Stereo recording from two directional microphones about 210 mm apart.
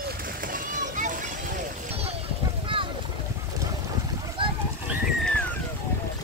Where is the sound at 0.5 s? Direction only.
40° right (ahead or behind).